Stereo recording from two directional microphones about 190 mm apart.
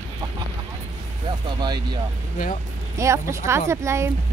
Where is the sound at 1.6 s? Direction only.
20° right (ahead or behind).